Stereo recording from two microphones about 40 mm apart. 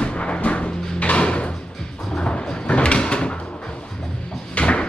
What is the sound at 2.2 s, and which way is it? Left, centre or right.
Sliding door, left.